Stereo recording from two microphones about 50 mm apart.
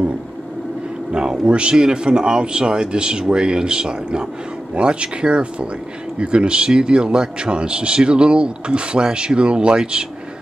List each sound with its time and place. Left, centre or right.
1.1 s speech: centre